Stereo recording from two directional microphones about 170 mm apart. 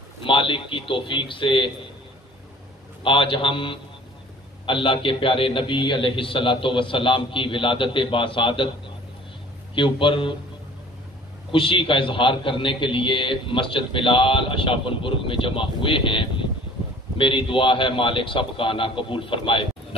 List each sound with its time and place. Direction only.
0.2 s a man's voice: 30° left (ahead or behind)
3.0 s a man's voice: 30° left (ahead or behind)
9.8 s a man's voice: 30° left (ahead or behind)
11.5 s a man's voice: 30° left (ahead or behind)